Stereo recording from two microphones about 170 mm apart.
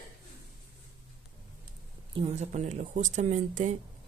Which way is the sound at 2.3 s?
40° right (ahead or behind).